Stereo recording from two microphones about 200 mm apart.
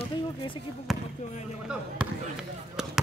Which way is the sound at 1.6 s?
5° right (ahead or behind).